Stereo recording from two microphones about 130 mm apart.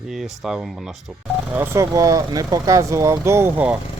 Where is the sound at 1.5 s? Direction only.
15° right (ahead or behind).